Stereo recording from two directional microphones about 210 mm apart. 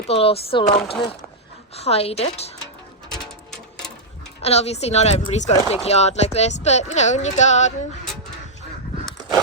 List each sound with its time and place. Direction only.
0.1 s a woman's voice: 25° left (ahead or behind)
3.1 s music: centre (ahead or behind)
4.4 s speech: 30° left (ahead or behind)